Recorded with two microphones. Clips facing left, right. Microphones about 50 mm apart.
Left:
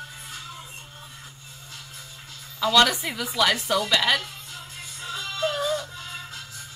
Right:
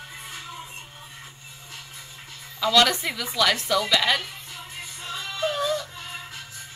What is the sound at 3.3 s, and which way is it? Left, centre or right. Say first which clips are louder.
Speech: even; centre.